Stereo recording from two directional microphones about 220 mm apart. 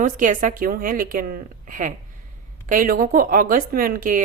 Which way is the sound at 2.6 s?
40° right (ahead or behind).